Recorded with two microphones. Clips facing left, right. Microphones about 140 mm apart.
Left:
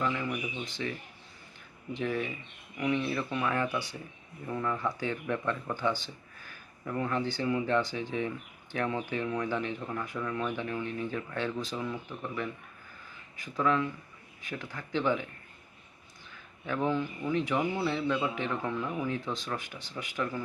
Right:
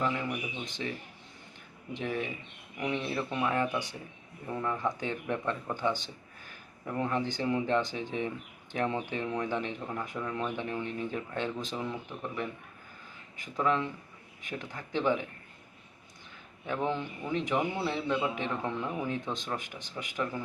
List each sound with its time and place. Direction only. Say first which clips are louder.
0.0 s speech: even; 10° right (ahead or behind)
16.6 s speech: left 2 dB; 20° right (ahead or behind)